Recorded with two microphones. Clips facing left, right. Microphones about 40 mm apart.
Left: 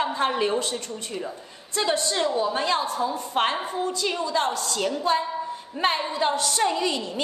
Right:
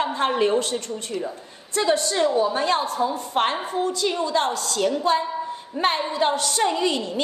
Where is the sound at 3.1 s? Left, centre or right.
Left.